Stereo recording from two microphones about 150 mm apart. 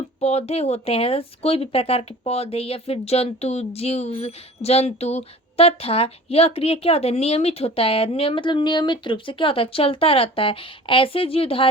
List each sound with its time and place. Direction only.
0.2 s speech: 45° left (ahead or behind)